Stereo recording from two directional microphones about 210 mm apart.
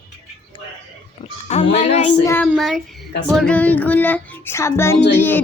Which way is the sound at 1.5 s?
30° left (ahead or behind).